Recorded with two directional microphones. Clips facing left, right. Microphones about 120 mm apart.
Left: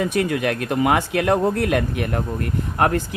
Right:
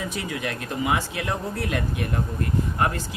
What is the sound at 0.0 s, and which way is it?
Speech, 60° left (ahead or behind).